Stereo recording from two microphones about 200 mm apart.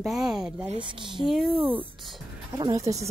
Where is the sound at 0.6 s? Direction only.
25° right (ahead or behind).